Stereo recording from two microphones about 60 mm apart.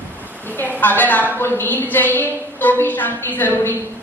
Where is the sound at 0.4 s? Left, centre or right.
Left.